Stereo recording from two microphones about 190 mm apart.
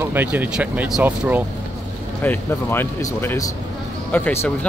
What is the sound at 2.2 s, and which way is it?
Speech, 10° left (ahead or behind).